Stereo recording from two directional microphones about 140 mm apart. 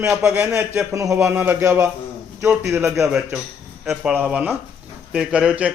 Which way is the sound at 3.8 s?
5° right (ahead or behind).